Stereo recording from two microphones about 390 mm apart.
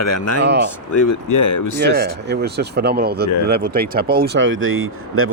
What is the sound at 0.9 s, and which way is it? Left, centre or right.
Speech, left.